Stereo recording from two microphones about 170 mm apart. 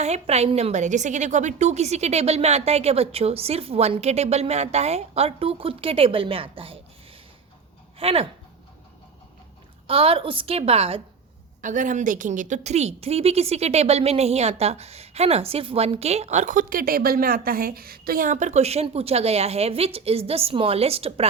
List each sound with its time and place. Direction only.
0.0 s a woman's voice: 40° right (ahead or behind)
7.9 s a woman's voice: 35° right (ahead or behind)
9.8 s a woman's voice: 35° right (ahead or behind)
11.6 s a woman's voice: 50° right (ahead or behind)